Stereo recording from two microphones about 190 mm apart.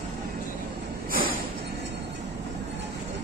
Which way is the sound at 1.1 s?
50° right (ahead or behind).